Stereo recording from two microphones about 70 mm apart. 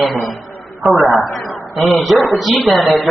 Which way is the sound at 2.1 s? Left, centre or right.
Left.